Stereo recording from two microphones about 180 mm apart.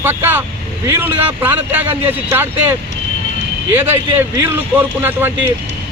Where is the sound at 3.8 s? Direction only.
10° right (ahead or behind).